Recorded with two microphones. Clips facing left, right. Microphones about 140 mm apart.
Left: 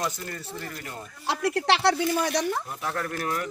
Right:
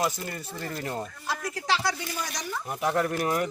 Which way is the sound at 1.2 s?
70° left (ahead or behind).